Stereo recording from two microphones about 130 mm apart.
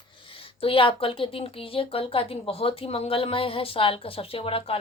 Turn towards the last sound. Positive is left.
turn(degrees=45)  # may be behind; listen again after turning